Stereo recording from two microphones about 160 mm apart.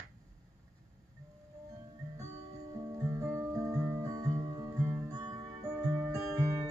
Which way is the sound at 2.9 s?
20° right (ahead or behind).